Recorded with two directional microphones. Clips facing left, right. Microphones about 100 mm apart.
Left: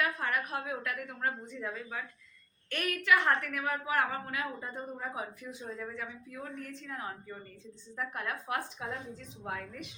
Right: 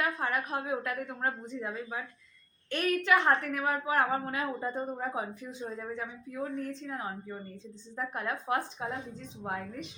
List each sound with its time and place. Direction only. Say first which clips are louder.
0.0 s a woman's voice: right 1 dB; 25° right (ahead or behind)